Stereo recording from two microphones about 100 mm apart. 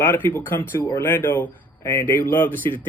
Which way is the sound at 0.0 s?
20° left (ahead or behind).